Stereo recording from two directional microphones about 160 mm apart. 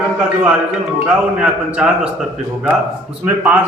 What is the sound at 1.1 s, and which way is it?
Speech, 5° right (ahead or behind).